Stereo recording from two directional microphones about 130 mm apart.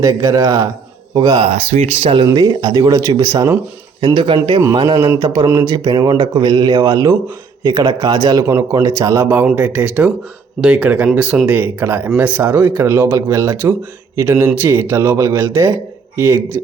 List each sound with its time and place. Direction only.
0.0 s speech: 25° right (ahead or behind)
1.4 s speech: 55° right (ahead or behind)
2.2 s speech: 30° right (ahead or behind)
4.0 s speech: 40° right (ahead or behind); by 16.4 s 20° right (ahead or behind)